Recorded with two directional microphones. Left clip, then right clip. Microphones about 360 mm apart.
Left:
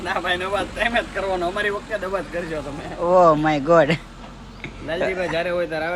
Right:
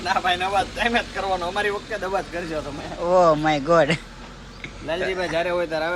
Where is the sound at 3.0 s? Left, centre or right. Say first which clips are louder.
Left 2 dB; centre.